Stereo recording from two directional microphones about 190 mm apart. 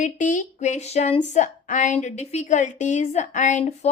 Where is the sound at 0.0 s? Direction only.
40° left (ahead or behind).